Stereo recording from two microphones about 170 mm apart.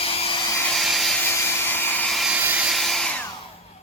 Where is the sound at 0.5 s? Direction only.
5° left (ahead or behind).